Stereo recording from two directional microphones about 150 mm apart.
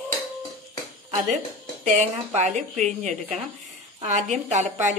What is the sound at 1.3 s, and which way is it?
Speech, 55° right (ahead or behind).